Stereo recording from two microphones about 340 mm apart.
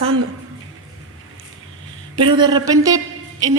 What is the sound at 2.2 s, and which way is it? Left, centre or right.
Speech, centre.